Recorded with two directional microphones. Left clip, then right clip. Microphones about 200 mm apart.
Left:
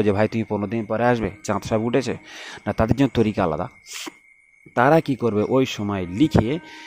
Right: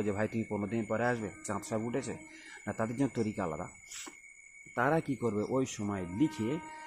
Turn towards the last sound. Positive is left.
turn(degrees=40)  # may be behind; listen again after turning